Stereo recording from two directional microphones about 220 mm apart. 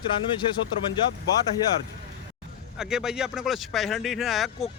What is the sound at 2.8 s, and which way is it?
Speech, 5° right (ahead or behind).